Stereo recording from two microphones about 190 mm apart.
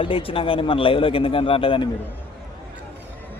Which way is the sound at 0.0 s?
30° left (ahead or behind).